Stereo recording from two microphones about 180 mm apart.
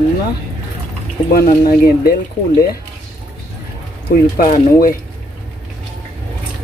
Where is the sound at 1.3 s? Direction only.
55° left (ahead or behind).